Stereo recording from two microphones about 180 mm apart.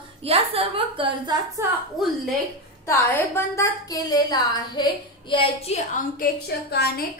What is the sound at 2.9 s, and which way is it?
A woman's voice, 15° left (ahead or behind).